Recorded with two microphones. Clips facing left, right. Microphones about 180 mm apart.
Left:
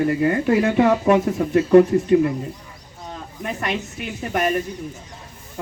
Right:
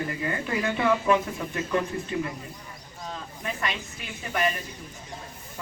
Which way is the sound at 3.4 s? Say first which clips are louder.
Left 6 dB; 50° left (ahead or behind).